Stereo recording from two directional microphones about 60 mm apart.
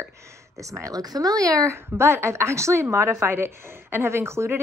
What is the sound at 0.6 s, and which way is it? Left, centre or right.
Speech, right.